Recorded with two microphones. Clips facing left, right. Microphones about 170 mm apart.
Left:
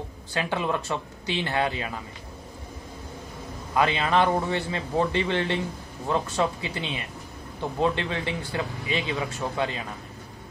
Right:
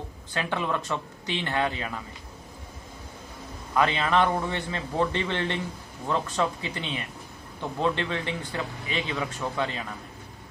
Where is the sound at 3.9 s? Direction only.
10° left (ahead or behind).